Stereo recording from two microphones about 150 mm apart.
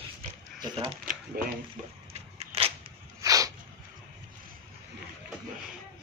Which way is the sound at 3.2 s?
25° right (ahead or behind).